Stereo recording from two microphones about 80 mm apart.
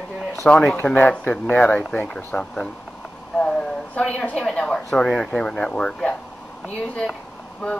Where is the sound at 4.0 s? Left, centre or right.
Centre.